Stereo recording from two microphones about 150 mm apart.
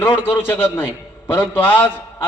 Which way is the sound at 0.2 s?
15° left (ahead or behind).